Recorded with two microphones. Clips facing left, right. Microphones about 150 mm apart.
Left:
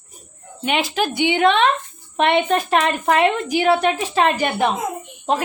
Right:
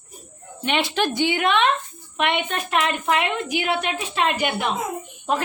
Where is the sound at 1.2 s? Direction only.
25° left (ahead or behind).